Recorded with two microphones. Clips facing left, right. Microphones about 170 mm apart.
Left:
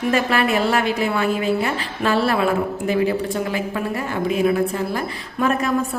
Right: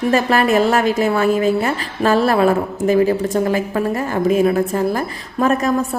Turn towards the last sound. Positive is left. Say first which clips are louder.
# right 3 dB
turn(degrees=-40)  # may be behind; listen again after turning